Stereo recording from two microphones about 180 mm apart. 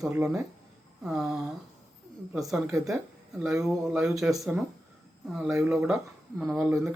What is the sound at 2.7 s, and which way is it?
Speech, 20° right (ahead or behind).